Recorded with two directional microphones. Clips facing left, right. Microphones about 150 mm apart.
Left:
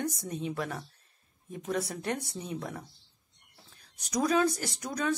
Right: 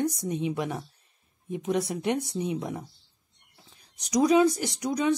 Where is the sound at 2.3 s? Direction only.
10° right (ahead or behind).